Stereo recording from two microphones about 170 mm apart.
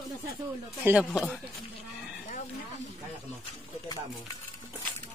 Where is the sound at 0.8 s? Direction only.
5° right (ahead or behind).